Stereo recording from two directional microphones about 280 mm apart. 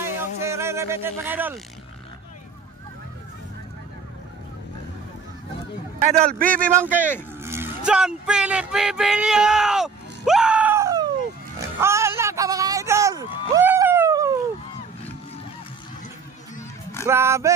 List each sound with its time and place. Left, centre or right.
0.0 s vehicle: centre
6.0 s speech: right
6.3 s speech: centre
6.7 s speech: centre
11.5 s music: centre
13.5 s a sound: centre
17.1 s speech: centre